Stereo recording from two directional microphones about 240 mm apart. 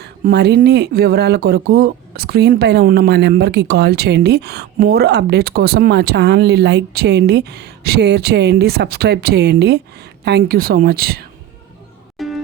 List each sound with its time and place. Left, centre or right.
0.0 s speech: right
12.1 s music: centre